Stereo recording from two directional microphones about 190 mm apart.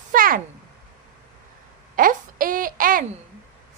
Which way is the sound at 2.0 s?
45° right (ahead or behind).